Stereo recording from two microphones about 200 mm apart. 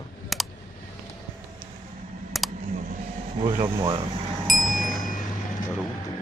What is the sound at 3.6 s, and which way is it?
Speech, 20° right (ahead or behind).